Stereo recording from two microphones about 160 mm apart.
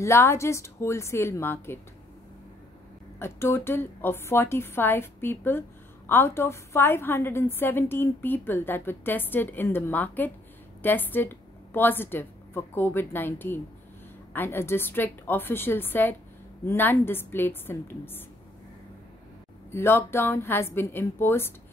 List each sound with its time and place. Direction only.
0.0 s a woman's voice: 15° left (ahead or behind)
3.2 s a woman's voice: 15° left (ahead or behind)
19.7 s a woman's voice: 15° left (ahead or behind)